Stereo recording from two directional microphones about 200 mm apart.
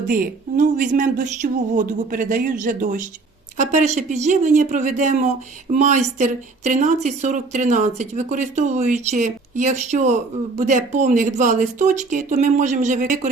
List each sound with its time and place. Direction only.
0.1 s speech: 40° right (ahead or behind)